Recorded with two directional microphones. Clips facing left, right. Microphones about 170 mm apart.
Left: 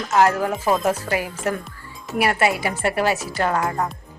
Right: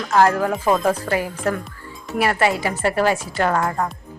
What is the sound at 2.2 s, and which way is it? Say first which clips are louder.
Speech: right 1 dB; 20° left (ahead or behind).